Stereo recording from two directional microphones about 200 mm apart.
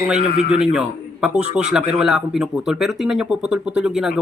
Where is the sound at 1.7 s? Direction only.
5° right (ahead or behind).